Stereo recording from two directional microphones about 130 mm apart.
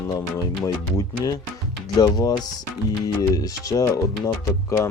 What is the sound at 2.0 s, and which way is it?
Music, 30° left (ahead or behind).